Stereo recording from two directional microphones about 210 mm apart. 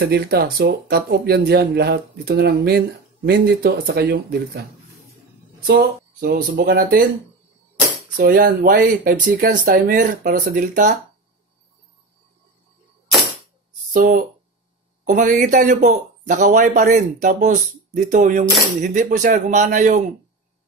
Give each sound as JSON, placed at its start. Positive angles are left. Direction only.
{"t": 0.0, "sound": "speech", "side_deg": -45}
{"t": 5.7, "sound": "a man's voice", "side_deg": -45}
{"t": 8.2, "sound": "a man's voice", "side_deg": -45}
{"t": 13.9, "sound": "a man's voice", "side_deg": -40}